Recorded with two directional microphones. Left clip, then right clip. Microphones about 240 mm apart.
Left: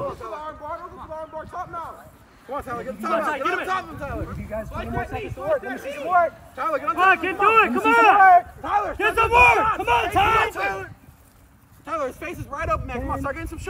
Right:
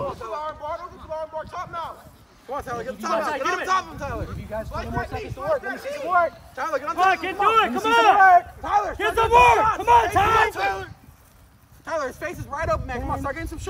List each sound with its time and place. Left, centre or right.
0.0 s a sound: right
2.5 s speech: right
6.5 s speech: right
7.0 s speech: right
8.3 s speech: right
8.8 s speech: right
10.5 s speech: centre
11.9 s speech: right